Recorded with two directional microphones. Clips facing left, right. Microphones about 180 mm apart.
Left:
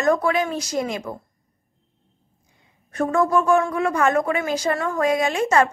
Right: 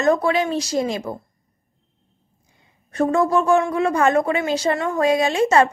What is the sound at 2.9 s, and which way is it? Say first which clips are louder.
A woman's voice: right 2 dB; 25° right (ahead or behind).